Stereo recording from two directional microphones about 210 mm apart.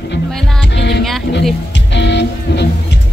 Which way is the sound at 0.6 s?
55° left (ahead or behind).